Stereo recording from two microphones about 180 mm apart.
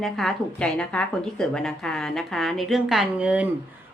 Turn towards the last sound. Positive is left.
turn(degrees=-5)  # may be behind; listen again after turning